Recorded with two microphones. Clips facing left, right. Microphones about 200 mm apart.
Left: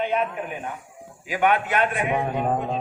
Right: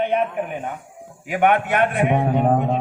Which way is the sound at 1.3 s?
60° right (ahead or behind).